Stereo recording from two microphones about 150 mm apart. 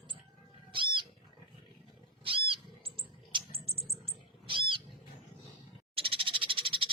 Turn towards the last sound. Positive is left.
turn(degrees=-35)  # may be behind; listen again after turning